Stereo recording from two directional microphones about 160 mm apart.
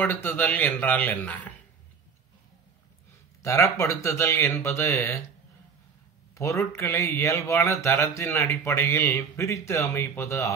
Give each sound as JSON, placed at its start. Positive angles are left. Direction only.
{"t": 0.0, "sound": "a man's voice", "side_deg": 10}
{"t": 3.4, "sound": "a man's voice", "side_deg": 20}
{"t": 6.3, "sound": "a man's voice", "side_deg": 20}